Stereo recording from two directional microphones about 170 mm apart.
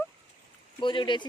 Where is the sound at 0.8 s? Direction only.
30° left (ahead or behind).